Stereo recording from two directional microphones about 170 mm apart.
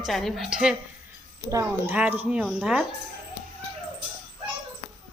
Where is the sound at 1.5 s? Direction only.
20° right (ahead or behind).